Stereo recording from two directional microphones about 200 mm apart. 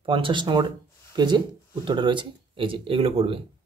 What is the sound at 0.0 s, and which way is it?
Speech, 25° right (ahead or behind).